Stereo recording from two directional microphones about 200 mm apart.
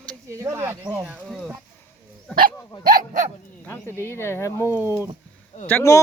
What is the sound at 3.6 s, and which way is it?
A man's voice, 10° left (ahead or behind).